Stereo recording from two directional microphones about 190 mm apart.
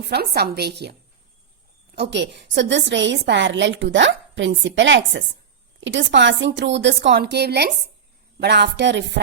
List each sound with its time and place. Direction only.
0.0 s a woman's voice: 60° right (ahead or behind)
2.0 s a woman's voice: 65° right (ahead or behind)